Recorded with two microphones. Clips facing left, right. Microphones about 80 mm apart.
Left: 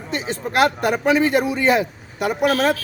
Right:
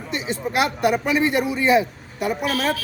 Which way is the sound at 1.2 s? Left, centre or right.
Left.